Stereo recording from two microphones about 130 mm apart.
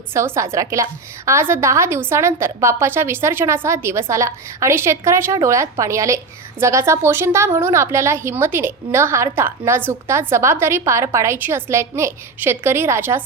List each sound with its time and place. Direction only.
0.1 s a woman's voice: 20° right (ahead or behind)